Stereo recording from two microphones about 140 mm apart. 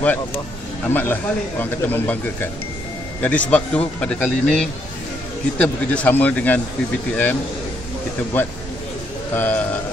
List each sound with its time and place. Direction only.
0.0 s speech: 10° left (ahead or behind)
9.3 s speech: 10° left (ahead or behind)